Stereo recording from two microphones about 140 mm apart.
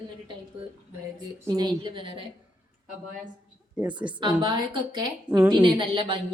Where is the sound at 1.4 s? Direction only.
25° right (ahead or behind).